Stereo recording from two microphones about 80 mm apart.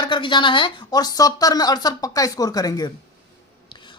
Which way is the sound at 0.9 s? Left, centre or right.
Left.